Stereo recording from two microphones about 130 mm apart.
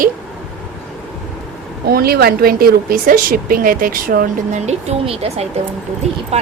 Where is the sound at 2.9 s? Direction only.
90° right.